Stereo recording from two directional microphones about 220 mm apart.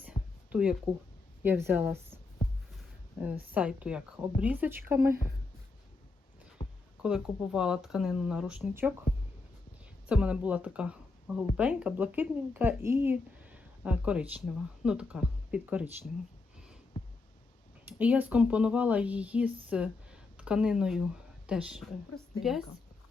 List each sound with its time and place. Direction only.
0.1 s music: 20° left (ahead or behind)
0.5 s speech: 5° right (ahead or behind)
3.2 s speech: 10° right (ahead or behind)
6.6 s a sound: 20° left (ahead or behind)
7.0 s speech: 5° right (ahead or behind)
10.1 s speech: 5° right (ahead or behind)
17.8 s speech: 5° right (ahead or behind)